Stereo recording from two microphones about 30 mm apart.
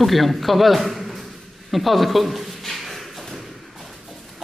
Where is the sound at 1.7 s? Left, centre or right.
Centre.